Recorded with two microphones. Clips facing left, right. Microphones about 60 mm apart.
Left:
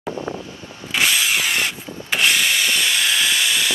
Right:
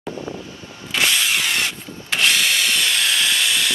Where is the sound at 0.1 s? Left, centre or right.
Left.